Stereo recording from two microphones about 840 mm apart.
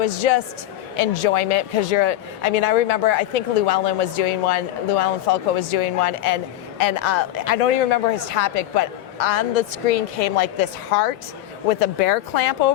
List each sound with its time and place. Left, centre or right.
0.0 s speech: left